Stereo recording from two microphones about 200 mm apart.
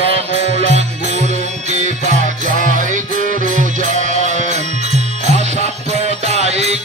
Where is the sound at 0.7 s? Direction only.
35° right (ahead or behind).